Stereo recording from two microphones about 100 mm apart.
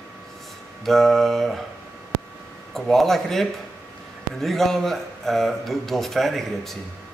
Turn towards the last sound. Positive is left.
turn(degrees=0)  # may be behind; listen again after turning